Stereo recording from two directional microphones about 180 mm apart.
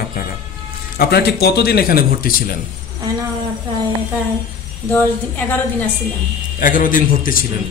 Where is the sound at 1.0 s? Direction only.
60° left (ahead or behind).